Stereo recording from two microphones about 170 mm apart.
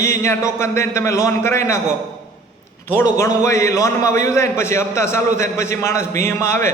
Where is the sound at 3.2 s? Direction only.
15° left (ahead or behind).